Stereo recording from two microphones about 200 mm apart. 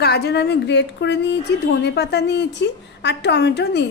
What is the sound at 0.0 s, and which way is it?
A woman's voice, 55° left (ahead or behind).